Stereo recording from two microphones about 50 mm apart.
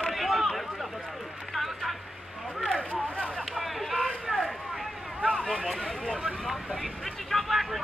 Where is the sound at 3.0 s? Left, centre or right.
Centre.